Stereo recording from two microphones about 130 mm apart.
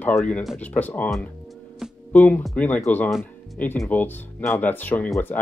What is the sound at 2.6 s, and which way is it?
Speech, 10° left (ahead or behind).